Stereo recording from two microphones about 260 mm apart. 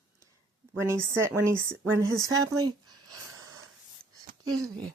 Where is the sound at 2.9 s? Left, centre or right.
Right.